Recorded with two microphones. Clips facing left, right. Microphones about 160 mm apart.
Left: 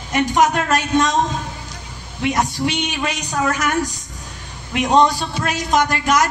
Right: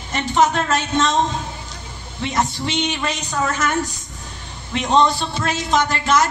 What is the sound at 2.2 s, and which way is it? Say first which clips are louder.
A man's voice: left 2 dB; 10° left (ahead or behind).